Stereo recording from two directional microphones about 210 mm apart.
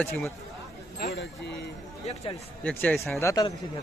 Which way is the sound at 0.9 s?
50° left (ahead or behind).